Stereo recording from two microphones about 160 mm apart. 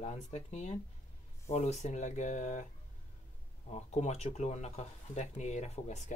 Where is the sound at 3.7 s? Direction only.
45° left (ahead or behind).